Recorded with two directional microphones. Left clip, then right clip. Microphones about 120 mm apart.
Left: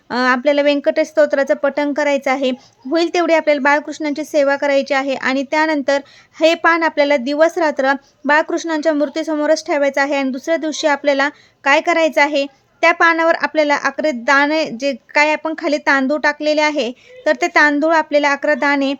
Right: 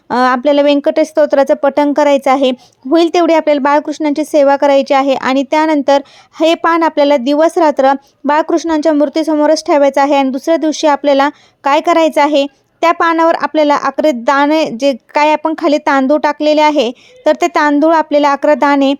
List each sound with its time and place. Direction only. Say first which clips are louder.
0.1 s a woman's voice: right 4 dB; 45° right (ahead or behind)